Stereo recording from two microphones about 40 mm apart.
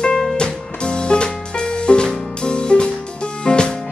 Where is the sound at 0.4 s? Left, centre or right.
Left.